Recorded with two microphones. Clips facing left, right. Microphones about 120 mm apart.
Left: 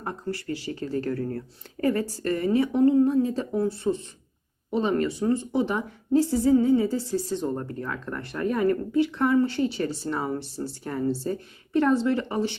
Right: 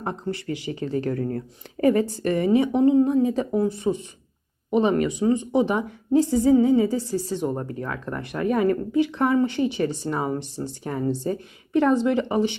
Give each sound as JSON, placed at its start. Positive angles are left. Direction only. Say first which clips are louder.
{"t": 0.0, "sound": "a woman's voice", "louder": "right 3 dB", "side_deg": -20}